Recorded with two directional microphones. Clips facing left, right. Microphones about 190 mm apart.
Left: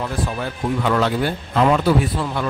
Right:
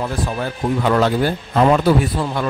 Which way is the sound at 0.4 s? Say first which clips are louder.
Right 4 dB; 40° right (ahead or behind).